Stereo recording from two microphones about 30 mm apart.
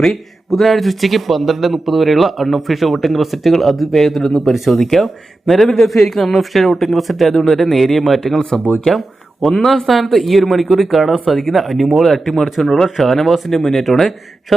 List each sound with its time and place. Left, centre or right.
0.0 s speech: centre
4.8 s speech: centre
8.9 s a sound: centre
9.6 s speech: centre
12.7 s speech: centre